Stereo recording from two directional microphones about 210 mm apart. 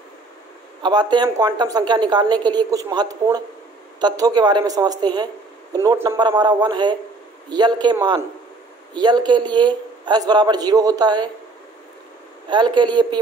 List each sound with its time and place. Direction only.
0.8 s speech: 20° right (ahead or behind)
12.4 s speech: 20° right (ahead or behind)